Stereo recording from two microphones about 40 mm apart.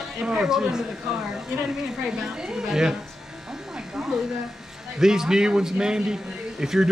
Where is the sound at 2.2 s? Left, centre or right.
Centre.